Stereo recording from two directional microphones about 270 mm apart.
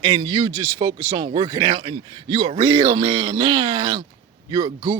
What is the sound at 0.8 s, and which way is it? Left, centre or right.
A man's voice, centre.